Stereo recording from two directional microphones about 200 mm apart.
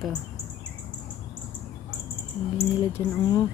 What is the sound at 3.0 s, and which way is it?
Speech, 15° left (ahead or behind).